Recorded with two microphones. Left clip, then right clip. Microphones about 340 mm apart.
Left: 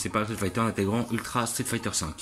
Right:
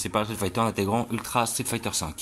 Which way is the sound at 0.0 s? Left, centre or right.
Centre.